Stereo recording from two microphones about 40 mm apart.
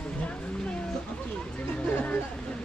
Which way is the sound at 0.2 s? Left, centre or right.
Left.